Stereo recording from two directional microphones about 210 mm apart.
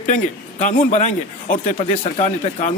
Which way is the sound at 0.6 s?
35° left (ahead or behind).